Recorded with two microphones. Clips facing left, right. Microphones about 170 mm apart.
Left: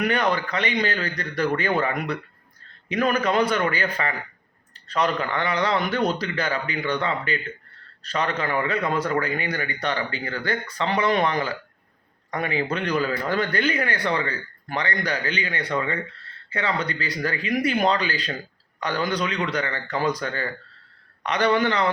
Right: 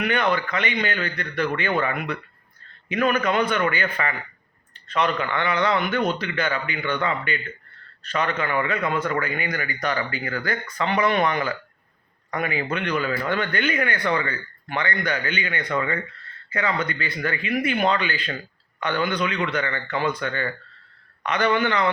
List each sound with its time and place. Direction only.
0.0 s speech: 35° left (ahead or behind)